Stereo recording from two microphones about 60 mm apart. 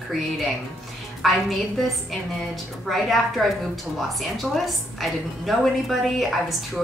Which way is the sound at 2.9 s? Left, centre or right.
Centre.